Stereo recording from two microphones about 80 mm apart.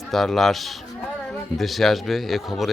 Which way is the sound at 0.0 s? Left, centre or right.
Centre.